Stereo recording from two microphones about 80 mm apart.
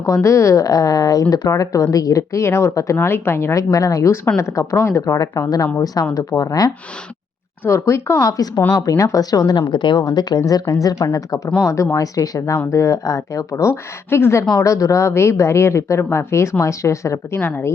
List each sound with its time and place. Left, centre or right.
0.0 s a woman's voice: left
7.6 s a woman's voice: left
8.3 s speech: left
9.6 s speech: left
10.0 s a woman's voice: left